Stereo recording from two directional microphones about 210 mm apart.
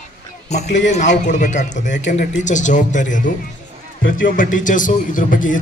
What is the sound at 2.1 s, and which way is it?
A man's voice, 35° left (ahead or behind).